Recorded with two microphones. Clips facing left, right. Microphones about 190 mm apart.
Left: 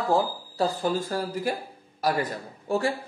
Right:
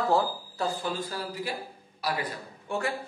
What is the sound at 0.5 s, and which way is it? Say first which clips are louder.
A man's voice: left 8 dB; 40° left (ahead or behind).